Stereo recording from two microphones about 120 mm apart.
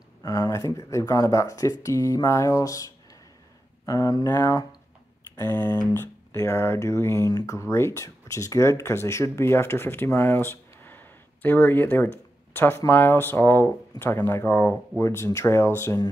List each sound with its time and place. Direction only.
0.2 s speech: 25° left (ahead or behind)
5.3 s a sound: 20° left (ahead or behind)
5.9 s speech: 20° left (ahead or behind)